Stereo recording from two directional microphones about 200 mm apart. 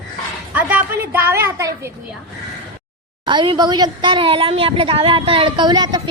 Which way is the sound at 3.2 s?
25° right (ahead or behind).